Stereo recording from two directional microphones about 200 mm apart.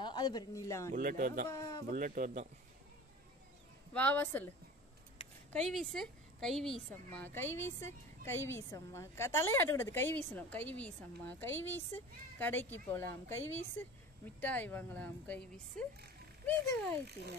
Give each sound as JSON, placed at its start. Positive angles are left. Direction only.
{"t": 0.0, "sound": "a man's voice", "side_deg": 20}
{"t": 0.9, "sound": "a man's voice", "side_deg": -45}
{"t": 1.5, "sound": "a woman's voice", "side_deg": 15}
{"t": 1.9, "sound": "a man's voice", "side_deg": -45}
{"t": 3.9, "sound": "a woman's voice", "side_deg": 10}
{"t": 5.7, "sound": "a woman's voice", "side_deg": 0}
{"t": 14.4, "sound": "a woman's voice", "side_deg": 10}